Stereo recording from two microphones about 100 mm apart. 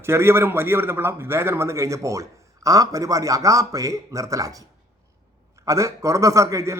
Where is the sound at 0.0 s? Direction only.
25° right (ahead or behind).